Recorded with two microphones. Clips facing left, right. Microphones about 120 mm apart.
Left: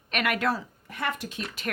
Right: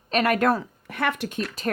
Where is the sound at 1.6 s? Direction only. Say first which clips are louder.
Right 6 dB; 40° right (ahead or behind).